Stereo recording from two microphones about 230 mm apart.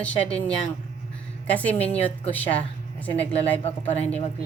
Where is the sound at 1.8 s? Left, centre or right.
Left.